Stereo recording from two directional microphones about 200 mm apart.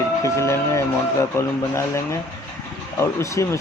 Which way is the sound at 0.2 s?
15° left (ahead or behind).